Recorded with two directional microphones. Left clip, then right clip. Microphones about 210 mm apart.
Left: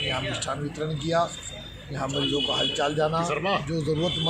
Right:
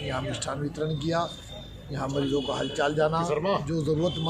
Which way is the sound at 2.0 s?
25° right (ahead or behind).